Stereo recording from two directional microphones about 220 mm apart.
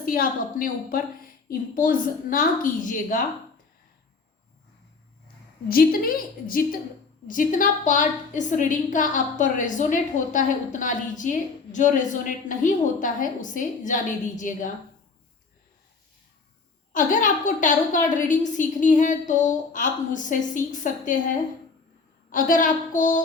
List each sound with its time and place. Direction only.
0.0 s a woman's voice: 40° left (ahead or behind)
5.6 s a woman's voice: 40° left (ahead or behind)
16.9 s a woman's voice: 35° left (ahead or behind)
22.3 s a woman's voice: 40° left (ahead or behind)